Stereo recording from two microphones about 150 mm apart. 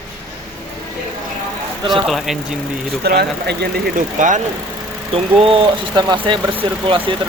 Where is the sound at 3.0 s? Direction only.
90° right; by 4.4 s 60° right (ahead or behind).